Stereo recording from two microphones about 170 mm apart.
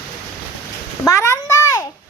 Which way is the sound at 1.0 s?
15° left (ahead or behind).